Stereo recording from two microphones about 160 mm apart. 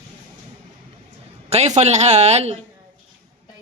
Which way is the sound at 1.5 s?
45° right (ahead or behind).